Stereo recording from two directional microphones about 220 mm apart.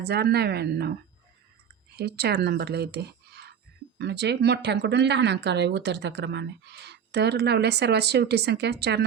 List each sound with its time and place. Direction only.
0.0 s speech: 45° right (ahead or behind)
2.0 s speech: 45° right (ahead or behind)